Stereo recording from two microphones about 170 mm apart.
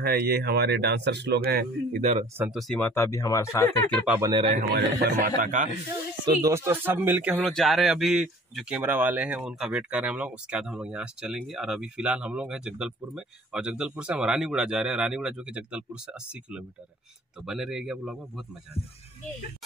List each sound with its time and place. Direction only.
0.0 s speech: 65° right (ahead or behind)
2.3 s speech: 10° right (ahead or behind)
2.6 s speech: centre (ahead or behind)
2.9 s speech: 15° left (ahead or behind)
4.3 s a man's voice: 30° right (ahead or behind)
4.6 s speech: 70° right (ahead or behind)
5.0 s speech: 55° right (ahead or behind)
6.2 s speech: 20° right (ahead or behind)